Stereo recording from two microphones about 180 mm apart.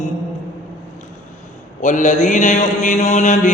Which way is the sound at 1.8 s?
45° left (ahead or behind).